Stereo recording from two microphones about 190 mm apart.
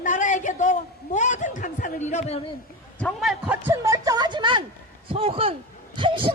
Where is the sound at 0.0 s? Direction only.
40° left (ahead or behind).